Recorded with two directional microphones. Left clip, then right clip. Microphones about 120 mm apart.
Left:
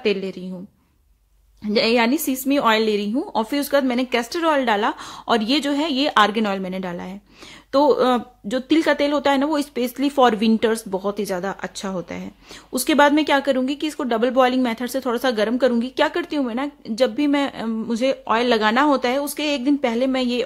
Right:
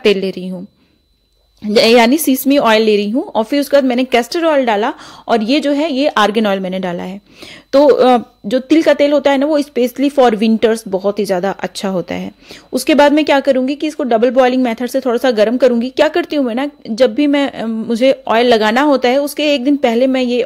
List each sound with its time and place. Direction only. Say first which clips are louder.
0.0 s a woman's voice: right 9 dB; 50° right (ahead or behind)
1.7 s a woman's voice: right 9 dB; 50° right (ahead or behind)
4.5 s a woman's voice: right 4 dB; 20° right (ahead or behind)
6.2 s a woman's voice: right 7 dB; 35° right (ahead or behind)
12.7 s a woman's voice: right 6 dB; 30° right (ahead or behind)